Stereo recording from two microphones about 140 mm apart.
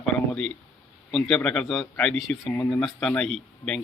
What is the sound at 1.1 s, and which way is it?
Speech, 5° left (ahead or behind).